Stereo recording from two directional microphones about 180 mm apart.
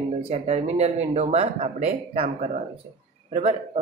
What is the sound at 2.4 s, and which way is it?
Speech, 45° right (ahead or behind).